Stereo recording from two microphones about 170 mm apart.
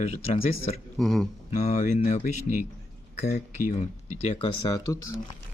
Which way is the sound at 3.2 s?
40° left (ahead or behind).